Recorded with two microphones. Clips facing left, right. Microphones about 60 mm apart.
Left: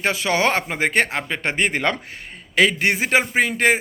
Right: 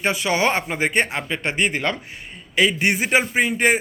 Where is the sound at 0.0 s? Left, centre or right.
Left.